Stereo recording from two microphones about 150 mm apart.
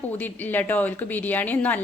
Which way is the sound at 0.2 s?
10° left (ahead or behind).